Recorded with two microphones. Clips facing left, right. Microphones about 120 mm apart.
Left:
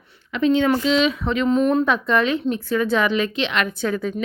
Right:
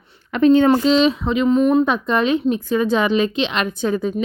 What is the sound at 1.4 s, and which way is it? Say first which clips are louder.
Speech: right 3 dB; centre (ahead or behind).